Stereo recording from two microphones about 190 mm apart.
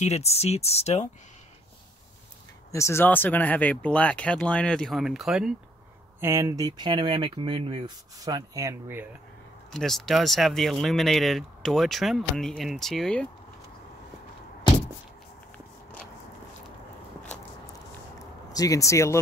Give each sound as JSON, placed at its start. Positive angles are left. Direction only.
{"t": 0.0, "sound": "speech", "side_deg": 35}
{"t": 2.7, "sound": "speech", "side_deg": 15}
{"t": 6.2, "sound": "speech", "side_deg": -15}
{"t": 9.7, "sound": "speech", "side_deg": 0}
{"t": 18.2, "sound": "a sound", "side_deg": 20}